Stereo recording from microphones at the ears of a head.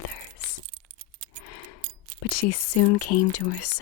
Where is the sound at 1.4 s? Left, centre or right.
Left.